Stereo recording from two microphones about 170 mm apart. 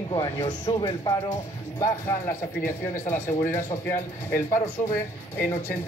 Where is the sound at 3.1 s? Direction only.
50° left (ahead or behind).